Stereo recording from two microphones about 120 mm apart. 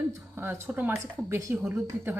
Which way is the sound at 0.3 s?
15° right (ahead or behind).